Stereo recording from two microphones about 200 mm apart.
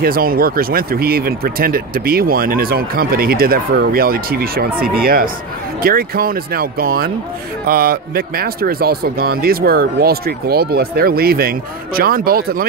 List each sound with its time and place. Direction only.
0.0 s speech: 45° right (ahead or behind)